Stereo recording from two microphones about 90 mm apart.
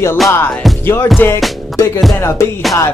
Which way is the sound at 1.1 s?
25° left (ahead or behind).